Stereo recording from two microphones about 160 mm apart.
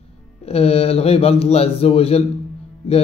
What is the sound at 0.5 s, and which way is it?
A man's voice, 40° left (ahead or behind).